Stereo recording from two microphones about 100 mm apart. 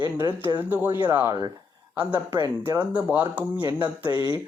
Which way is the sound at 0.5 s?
20° right (ahead or behind).